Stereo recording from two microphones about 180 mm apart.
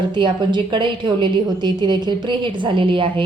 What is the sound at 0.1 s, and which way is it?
A woman's voice, 25° right (ahead or behind).